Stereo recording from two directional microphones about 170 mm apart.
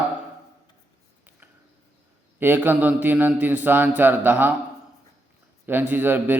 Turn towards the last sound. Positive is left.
turn(degrees=-10)  # may be behind; listen again after turning